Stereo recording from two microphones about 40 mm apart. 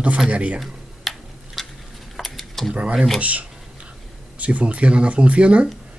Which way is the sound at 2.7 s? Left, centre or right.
Right.